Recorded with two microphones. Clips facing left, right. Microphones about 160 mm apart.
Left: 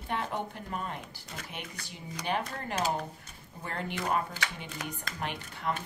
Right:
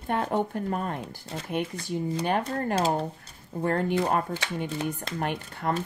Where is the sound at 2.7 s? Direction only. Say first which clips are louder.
Right 5 dB; 30° right (ahead or behind).